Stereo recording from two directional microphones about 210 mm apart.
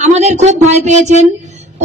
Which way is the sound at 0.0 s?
35° right (ahead or behind).